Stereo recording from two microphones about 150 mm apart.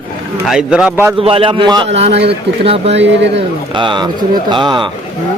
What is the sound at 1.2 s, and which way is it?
Speech, 40° right (ahead or behind).